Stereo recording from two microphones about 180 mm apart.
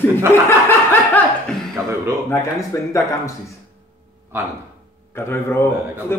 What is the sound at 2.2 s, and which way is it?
Speech, 15° left (ahead or behind).